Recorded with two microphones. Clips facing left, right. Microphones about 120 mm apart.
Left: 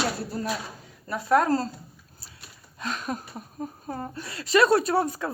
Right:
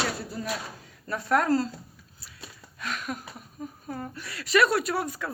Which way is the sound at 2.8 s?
30° left (ahead or behind).